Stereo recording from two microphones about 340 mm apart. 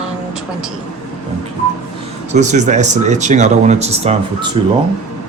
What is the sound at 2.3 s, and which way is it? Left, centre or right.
Speech, right.